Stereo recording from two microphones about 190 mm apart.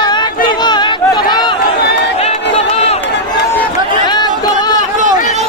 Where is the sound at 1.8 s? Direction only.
60° left (ahead or behind).